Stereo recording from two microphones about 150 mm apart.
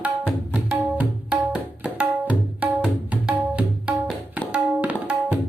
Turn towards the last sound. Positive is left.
turn(degrees=-10)  # may be behind; listen again after turning